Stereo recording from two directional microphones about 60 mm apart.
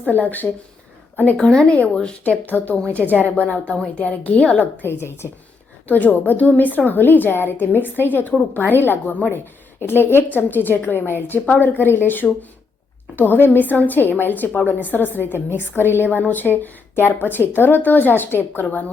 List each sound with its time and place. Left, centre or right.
0.1 s a woman's voice: left
1.4 s a woman's voice: centre
4.6 s a woman's voice: left
5.9 s a woman's voice: left
9.8 s a woman's voice: left